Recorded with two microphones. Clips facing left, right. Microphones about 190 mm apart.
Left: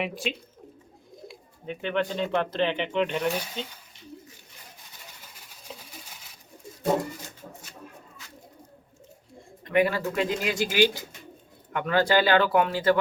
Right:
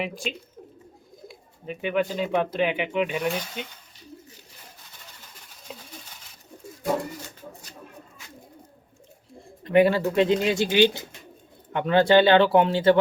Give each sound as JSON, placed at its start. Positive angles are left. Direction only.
{"t": 0.0, "sound": "speech", "side_deg": 0}
{"t": 9.6, "sound": "speech", "side_deg": -30}